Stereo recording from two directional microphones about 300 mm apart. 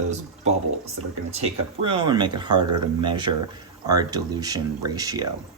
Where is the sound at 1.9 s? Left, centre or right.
Centre.